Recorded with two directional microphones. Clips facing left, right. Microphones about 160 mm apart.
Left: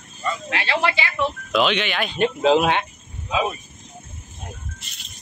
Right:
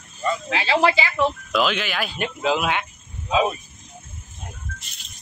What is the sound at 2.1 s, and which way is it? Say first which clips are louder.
Speech: left 8 dB; 30° left (ahead or behind).